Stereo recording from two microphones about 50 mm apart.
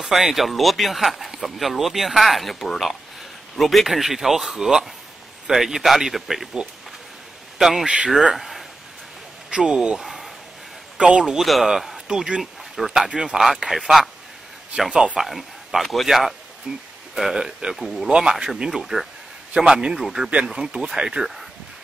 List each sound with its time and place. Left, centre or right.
0.0 s speech: centre
7.5 s speech: centre
7.8 s speech: right
8.4 s a sound: centre
9.5 s speech: centre
9.9 s a sound: centre
11.0 s a man's voice: centre
11.2 s speech: centre
13.1 s speech: centre
13.7 s speech: centre
15.1 s speech: centre
16.7 s speech: centre
18.0 s speech: centre
19.5 s speech: centre